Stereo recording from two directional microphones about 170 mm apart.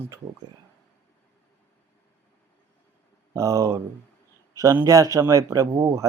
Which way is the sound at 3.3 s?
20° right (ahead or behind).